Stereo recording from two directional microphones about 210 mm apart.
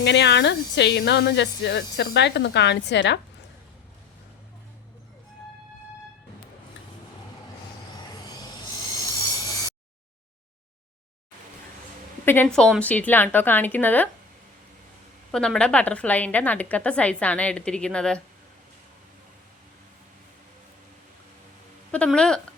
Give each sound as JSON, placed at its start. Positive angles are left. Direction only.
{"t": 0.0, "sound": "speech", "side_deg": 55}
{"t": 12.2, "sound": "a woman's voice", "side_deg": 10}
{"t": 15.3, "sound": "a woman's voice", "side_deg": 5}
{"t": 21.9, "sound": "a woman's voice", "side_deg": 5}